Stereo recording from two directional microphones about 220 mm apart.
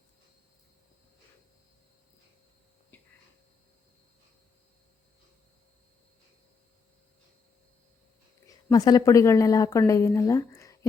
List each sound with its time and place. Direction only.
2.9 s whispering: 5° left (ahead or behind)
8.7 s a woman's voice: 20° left (ahead or behind)